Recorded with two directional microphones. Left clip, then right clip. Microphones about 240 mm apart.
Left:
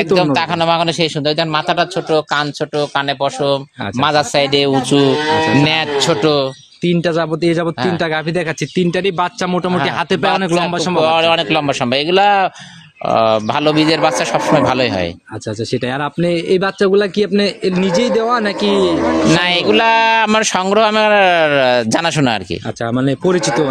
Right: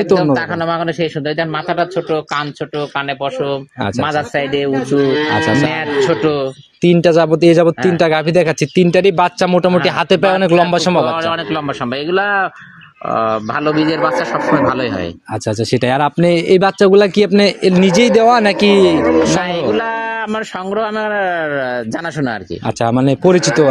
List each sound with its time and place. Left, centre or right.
0.2 s a man's voice: left
4.0 s a man's voice: left
6.8 s speech: centre
11.1 s a man's voice: left
15.7 s speech: right
19.4 s speech: left
22.8 s speech: centre